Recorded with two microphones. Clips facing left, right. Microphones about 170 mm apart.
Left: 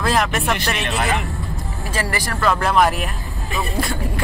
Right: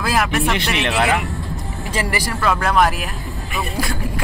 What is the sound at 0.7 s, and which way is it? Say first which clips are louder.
Speech: right 3 dB; 65° right (ahead or behind).